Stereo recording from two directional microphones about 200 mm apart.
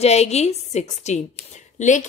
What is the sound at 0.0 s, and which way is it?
A woman's voice, 35° left (ahead or behind).